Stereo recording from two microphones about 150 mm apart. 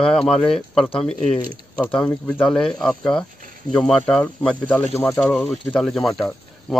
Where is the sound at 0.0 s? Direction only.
5° left (ahead or behind).